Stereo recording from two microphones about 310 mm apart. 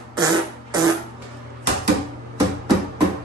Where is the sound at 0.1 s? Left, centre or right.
Centre.